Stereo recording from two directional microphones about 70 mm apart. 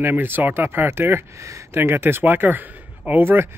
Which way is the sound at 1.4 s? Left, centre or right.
Right.